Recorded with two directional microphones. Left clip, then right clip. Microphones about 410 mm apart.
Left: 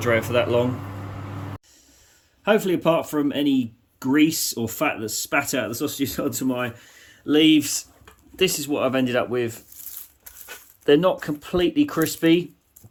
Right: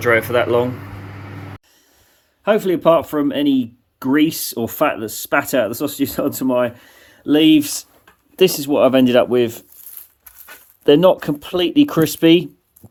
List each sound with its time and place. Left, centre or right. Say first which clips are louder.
0.0 s speech: right 5 dB; centre
2.4 s speech: right 5 dB; centre
10.8 s speech: right 6 dB; centre